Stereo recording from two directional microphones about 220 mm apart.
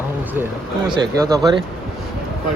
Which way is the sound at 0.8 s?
20° right (ahead or behind).